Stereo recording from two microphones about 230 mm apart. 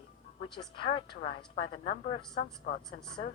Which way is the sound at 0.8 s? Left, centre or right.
Left.